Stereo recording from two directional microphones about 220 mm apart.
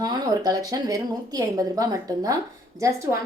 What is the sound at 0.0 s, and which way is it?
A woman's voice, 15° right (ahead or behind).